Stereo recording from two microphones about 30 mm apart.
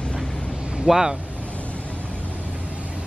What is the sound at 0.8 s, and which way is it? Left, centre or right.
Speech, centre.